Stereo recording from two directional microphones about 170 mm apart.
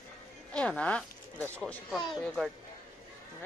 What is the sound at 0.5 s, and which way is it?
Speech, 5° left (ahead or behind).